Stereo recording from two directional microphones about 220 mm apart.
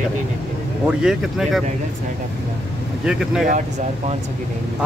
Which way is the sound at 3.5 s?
35° right (ahead or behind).